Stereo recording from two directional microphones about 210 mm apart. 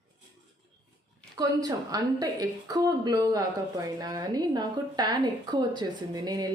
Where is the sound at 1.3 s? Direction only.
15° right (ahead or behind).